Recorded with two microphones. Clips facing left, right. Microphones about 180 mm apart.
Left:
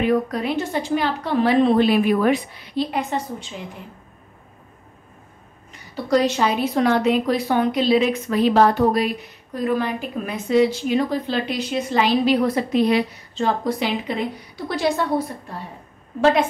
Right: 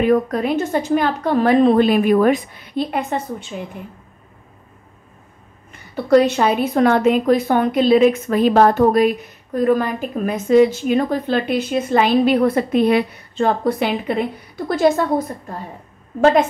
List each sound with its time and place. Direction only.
0.0 s a woman's voice: 50° right (ahead or behind)
5.7 s a woman's voice: 55° right (ahead or behind)
14.7 s a woman's voice: 45° right (ahead or behind)